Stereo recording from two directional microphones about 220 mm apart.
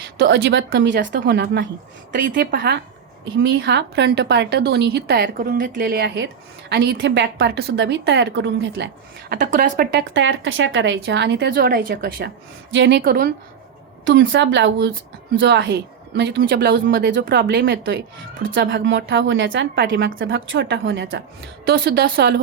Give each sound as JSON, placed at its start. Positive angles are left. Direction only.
{"t": 0.2, "sound": "a woman's voice", "side_deg": -60}
{"t": 2.1, "sound": "speech", "side_deg": -40}
{"t": 9.3, "sound": "speech", "side_deg": -35}
{"t": 12.7, "sound": "speech", "side_deg": -55}
{"t": 14.0, "sound": "a woman's voice", "side_deg": -60}
{"t": 21.7, "sound": "speech", "side_deg": -45}